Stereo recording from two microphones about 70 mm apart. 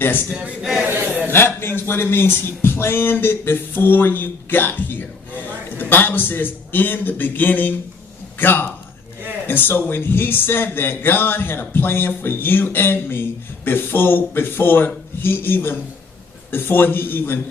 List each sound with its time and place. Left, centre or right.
0.0 s a man's voice: left
0.9 s a sound: right
1.3 s a man's voice: left